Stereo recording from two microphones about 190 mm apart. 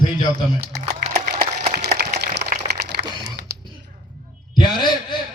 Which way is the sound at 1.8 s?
60° right (ahead or behind).